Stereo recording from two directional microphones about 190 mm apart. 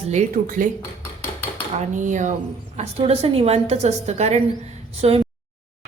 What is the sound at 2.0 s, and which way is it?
A woman's voice, 40° right (ahead or behind).